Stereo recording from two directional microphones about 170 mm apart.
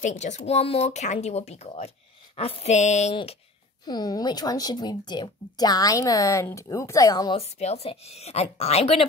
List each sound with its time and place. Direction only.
0.0 s speech: 45° left (ahead or behind)
3.8 s speech: 25° left (ahead or behind)
7.3 s speech: 40° left (ahead or behind)